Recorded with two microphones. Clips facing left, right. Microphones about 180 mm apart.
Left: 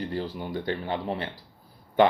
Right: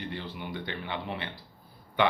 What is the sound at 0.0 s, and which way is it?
Speech, 40° left (ahead or behind).